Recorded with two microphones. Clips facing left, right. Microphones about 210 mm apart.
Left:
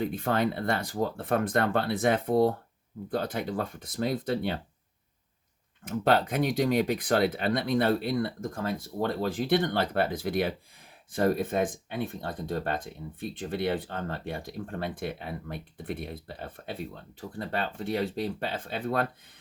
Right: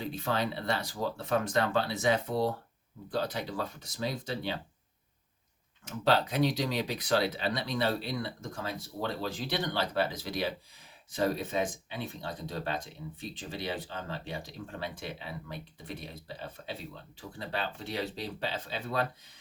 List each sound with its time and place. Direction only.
0.0 s speech: 50° left (ahead or behind)
5.8 s speech: 50° left (ahead or behind)